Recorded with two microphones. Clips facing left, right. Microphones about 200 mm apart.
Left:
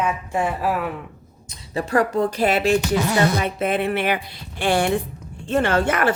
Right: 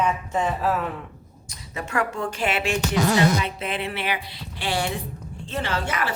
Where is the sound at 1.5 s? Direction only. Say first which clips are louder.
Left 7 dB; 35° left (ahead or behind).